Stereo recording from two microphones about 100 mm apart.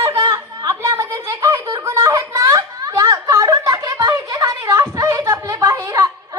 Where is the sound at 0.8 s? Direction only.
35° right (ahead or behind).